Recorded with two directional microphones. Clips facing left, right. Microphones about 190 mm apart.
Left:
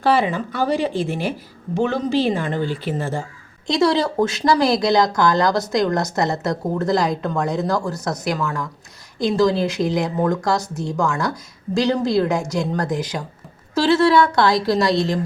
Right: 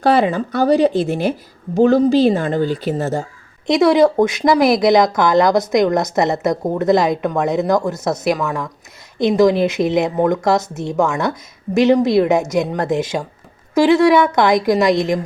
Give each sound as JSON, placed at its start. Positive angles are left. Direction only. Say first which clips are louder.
{"t": 0.0, "sound": "speech", "louder": "right 4 dB", "side_deg": -45}
{"t": 3.7, "sound": "a woman's voice", "louder": "right 6 dB", "side_deg": -20}